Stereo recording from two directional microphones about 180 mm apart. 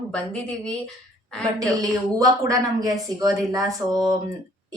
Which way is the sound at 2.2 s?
20° right (ahead or behind).